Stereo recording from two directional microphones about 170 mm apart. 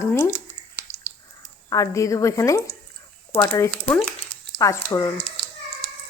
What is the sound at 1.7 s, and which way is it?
A woman's voice, 20° left (ahead or behind).